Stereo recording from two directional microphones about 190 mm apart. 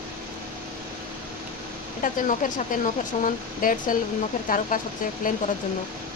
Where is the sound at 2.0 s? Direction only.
45° left (ahead or behind).